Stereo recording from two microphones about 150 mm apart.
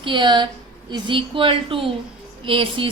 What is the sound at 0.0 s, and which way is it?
A woman's voice, 30° right (ahead or behind).